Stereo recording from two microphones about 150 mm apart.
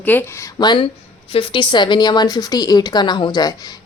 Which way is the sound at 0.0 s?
15° left (ahead or behind).